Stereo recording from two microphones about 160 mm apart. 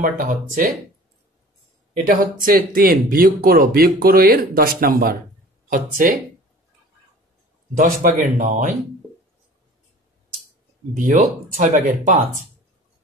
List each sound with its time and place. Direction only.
0.0 s speech: 60° right (ahead or behind)
2.0 s speech: 65° right (ahead or behind)
7.7 s speech: 60° right (ahead or behind)
11.0 s speech: 55° right (ahead or behind)